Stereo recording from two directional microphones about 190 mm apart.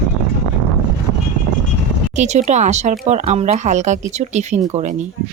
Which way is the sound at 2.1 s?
35° right (ahead or behind).